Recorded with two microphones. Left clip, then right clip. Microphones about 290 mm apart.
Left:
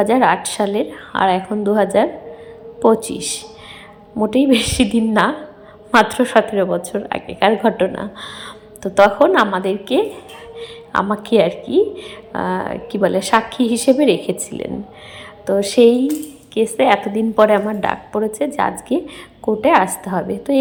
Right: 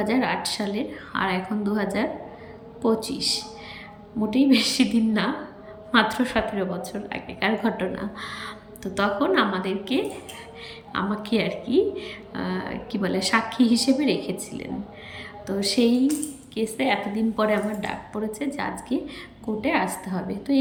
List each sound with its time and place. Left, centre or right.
0.0 s a woman's voice: centre